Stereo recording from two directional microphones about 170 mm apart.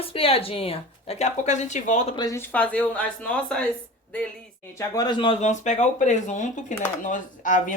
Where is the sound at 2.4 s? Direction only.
10° left (ahead or behind).